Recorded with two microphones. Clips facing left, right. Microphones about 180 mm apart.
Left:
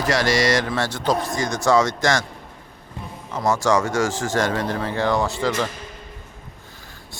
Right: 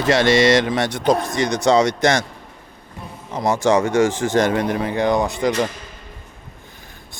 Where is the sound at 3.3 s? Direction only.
15° right (ahead or behind).